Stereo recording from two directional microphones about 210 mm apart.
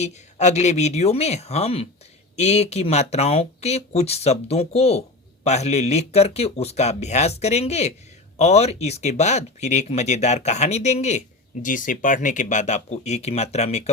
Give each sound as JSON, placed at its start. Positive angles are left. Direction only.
{"t": 0.0, "sound": "speech", "side_deg": 35}